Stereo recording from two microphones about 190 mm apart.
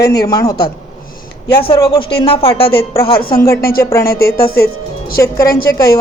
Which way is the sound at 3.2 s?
50° left (ahead or behind).